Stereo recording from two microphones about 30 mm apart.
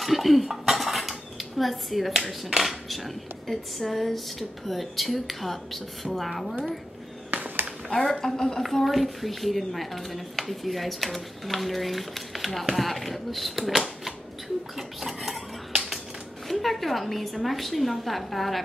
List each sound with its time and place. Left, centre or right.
0.0 s cutlery: centre
0.7 s dishes: centre
2.4 s speech: centre
7.3 s a sound: right
7.9 s a woman's voice: centre
8.8 s speech: centre
13.7 s typewriter: centre
14.8 s speech: centre
16.4 s speech: centre